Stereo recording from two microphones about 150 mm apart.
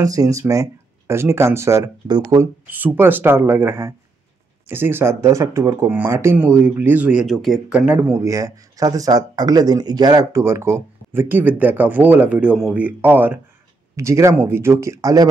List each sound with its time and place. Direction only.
0.0 s speech: 25° right (ahead or behind)